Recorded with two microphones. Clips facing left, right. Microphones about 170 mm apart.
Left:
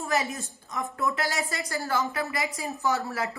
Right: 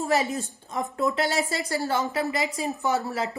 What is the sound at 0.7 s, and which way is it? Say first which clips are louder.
Speech: right 3 dB; 25° right (ahead or behind).